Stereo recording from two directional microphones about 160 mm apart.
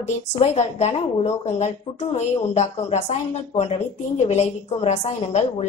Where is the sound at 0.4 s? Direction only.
45° left (ahead or behind).